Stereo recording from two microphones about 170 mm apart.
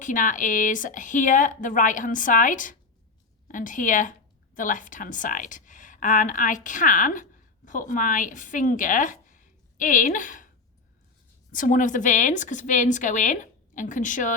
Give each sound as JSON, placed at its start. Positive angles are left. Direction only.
{"t": 0.0, "sound": "a woman's voice", "side_deg": 50}
{"t": 11.5, "sound": "a woman's voice", "side_deg": 50}